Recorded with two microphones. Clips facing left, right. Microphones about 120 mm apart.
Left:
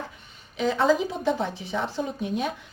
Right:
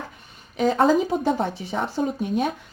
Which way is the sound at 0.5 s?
45° right (ahead or behind).